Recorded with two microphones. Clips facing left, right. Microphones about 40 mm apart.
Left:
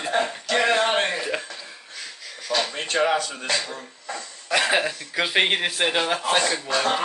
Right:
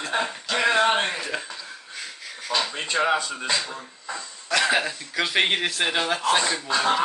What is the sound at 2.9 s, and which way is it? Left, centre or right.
Chuckle, right.